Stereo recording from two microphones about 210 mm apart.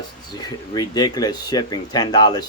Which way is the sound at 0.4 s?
20° left (ahead or behind).